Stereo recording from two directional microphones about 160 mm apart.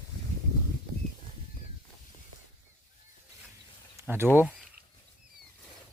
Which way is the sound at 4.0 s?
20° right (ahead or behind).